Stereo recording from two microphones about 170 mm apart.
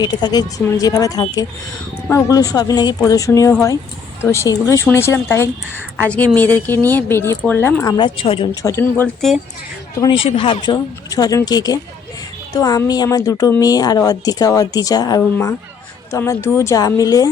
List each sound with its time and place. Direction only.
0.0 s speech: 25° left (ahead or behind)
7.9 s a woman's voice: 30° left (ahead or behind)
8.6 s speech: 15° left (ahead or behind)
10.0 s speech: 30° left (ahead or behind)